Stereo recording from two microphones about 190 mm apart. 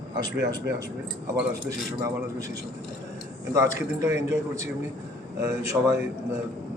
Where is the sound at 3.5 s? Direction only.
20° right (ahead or behind).